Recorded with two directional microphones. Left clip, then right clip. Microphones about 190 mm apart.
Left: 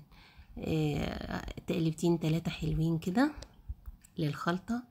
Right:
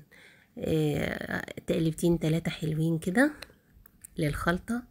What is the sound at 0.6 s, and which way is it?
Speech, 10° right (ahead or behind).